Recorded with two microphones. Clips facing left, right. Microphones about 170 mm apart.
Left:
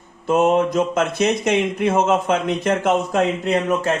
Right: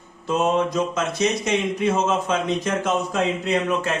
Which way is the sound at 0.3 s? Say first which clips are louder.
Left 4 dB; 55° left (ahead or behind).